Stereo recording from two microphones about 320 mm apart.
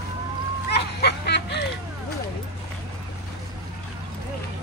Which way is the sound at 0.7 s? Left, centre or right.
Left.